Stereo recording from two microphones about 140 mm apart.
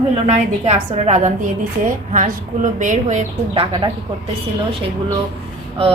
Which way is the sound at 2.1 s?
65° right (ahead or behind).